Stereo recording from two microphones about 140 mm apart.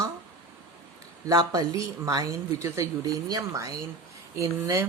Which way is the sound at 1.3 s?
25° right (ahead or behind).